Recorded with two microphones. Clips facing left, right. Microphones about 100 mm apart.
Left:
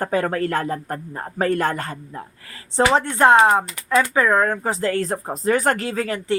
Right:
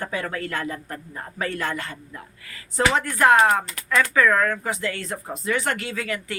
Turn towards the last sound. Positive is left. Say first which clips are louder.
# left 6 dB
turn(degrees=35)  # may be behind; listen again after turning